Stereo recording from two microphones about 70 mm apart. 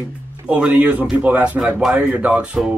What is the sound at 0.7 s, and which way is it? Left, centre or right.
Speech, right.